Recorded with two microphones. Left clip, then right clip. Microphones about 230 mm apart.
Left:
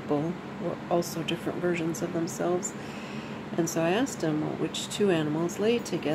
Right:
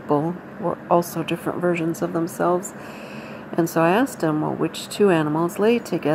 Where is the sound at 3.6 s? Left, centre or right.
Centre.